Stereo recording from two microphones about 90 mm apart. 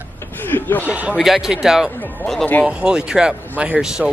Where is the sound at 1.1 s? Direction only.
5° right (ahead or behind).